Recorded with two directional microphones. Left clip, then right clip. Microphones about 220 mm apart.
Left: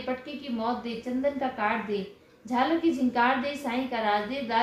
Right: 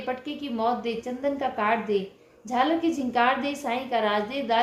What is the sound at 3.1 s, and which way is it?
A woman's voice, 40° right (ahead or behind).